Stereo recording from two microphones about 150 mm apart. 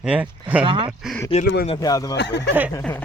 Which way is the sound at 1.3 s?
40° left (ahead or behind).